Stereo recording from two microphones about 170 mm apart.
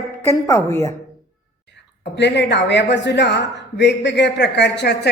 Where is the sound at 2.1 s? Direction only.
90° left.